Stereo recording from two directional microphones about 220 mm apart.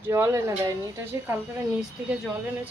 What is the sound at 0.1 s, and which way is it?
Speech, 10° right (ahead or behind).